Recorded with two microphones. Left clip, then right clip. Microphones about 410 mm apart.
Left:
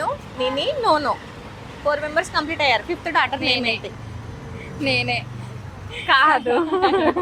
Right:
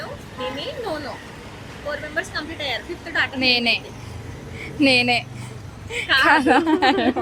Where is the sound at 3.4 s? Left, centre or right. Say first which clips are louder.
Right 2 dB; right.